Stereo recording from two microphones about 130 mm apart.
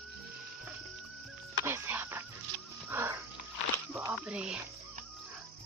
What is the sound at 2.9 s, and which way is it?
Sniff, 20° right (ahead or behind).